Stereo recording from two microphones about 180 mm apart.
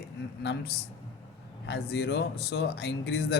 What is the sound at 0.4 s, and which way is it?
Speech, 65° left (ahead or behind).